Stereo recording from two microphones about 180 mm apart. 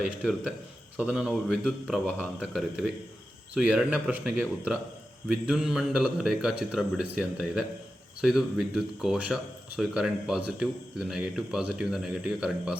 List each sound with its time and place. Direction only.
0.0 s speech: centre (ahead or behind)